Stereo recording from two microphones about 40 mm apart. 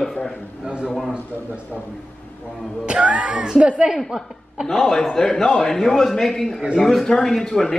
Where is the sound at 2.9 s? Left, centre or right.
Right.